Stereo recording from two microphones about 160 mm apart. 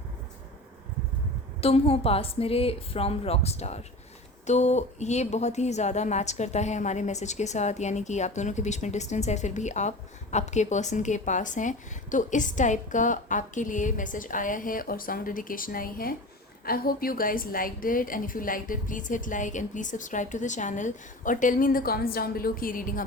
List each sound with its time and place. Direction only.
1.6 s a woman's voice: 40° left (ahead or behind); by 23.0 s 60° left (ahead or behind)